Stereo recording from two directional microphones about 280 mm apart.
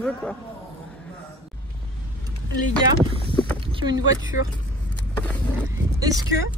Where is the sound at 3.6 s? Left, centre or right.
Centre.